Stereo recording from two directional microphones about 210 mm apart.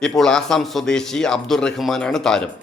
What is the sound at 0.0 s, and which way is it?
A man's voice, 5° left (ahead or behind).